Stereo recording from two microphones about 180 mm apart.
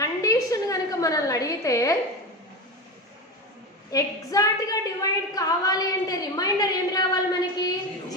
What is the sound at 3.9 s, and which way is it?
A woman's voice, 20° left (ahead or behind).